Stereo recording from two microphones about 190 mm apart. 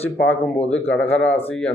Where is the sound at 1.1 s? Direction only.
90° left.